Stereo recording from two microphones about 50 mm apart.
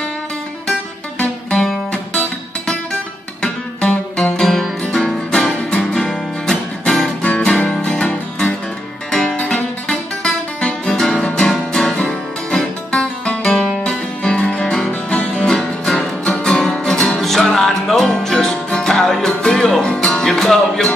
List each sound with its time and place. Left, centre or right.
2.6 s music: centre
4.5 s music: centre
5.3 s music: centre
7.2 s music: left
9.5 s guitar: centre
11.2 s music: centre
13.4 s music: centre
13.8 s music: centre
20.2 s music: centre